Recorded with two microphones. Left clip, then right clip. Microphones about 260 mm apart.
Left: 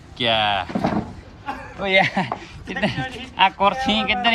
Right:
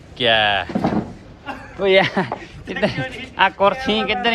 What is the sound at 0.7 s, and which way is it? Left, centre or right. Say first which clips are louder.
Speech: right 2 dB; left.